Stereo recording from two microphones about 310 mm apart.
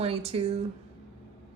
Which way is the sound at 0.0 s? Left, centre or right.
Centre.